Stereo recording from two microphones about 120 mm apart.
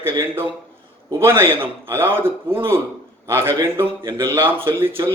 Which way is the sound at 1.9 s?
20° right (ahead or behind).